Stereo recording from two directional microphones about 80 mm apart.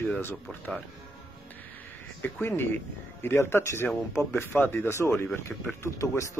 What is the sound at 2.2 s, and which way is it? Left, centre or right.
Speech, left.